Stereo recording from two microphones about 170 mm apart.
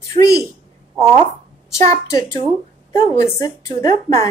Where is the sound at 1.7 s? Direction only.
20° left (ahead or behind).